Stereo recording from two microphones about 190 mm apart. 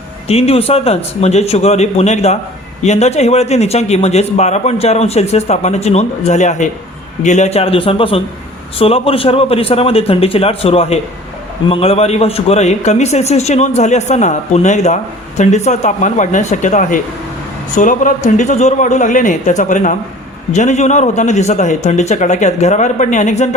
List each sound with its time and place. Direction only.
0.3 s a man's voice: 30° left (ahead or behind)